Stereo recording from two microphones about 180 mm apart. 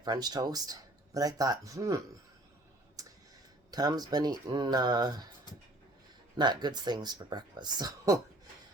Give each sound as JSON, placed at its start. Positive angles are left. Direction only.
{"t": 0.0, "sound": "speech", "side_deg": -25}
{"t": 3.0, "sound": "tick", "side_deg": -20}
{"t": 3.7, "sound": "speech", "side_deg": -20}
{"t": 6.3, "sound": "speech", "side_deg": -25}